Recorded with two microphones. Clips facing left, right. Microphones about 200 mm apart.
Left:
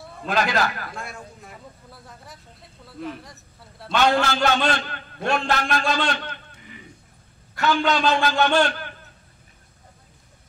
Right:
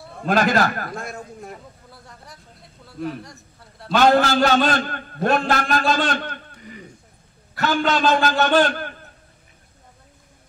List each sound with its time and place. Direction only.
0.3 s a man's voice: 45° right (ahead or behind)
1.9 s a man's voice: centre (ahead or behind)
3.9 s a man's voice: 45° right (ahead or behind)